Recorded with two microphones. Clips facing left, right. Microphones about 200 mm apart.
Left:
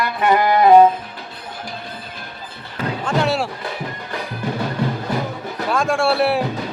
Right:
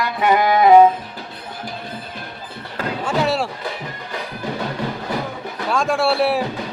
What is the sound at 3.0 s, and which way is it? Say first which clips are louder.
Slam: even; centre (ahead or behind).